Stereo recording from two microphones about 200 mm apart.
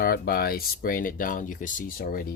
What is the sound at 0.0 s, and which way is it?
Speech, 50° left (ahead or behind).